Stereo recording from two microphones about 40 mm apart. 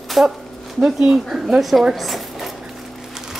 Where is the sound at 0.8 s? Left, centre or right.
Centre.